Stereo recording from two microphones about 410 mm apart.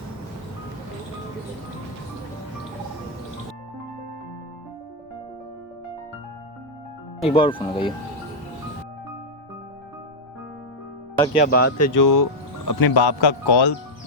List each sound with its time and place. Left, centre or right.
7.3 s speech: centre
11.3 s speech: left
11.8 s speech: left